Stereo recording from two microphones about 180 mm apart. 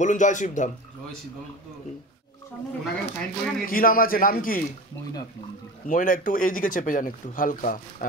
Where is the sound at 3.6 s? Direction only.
50° left (ahead or behind).